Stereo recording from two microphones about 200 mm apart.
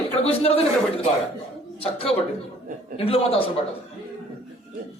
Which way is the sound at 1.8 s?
30° left (ahead or behind).